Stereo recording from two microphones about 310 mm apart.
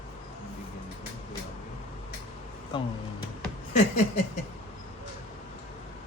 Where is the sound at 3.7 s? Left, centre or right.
Left.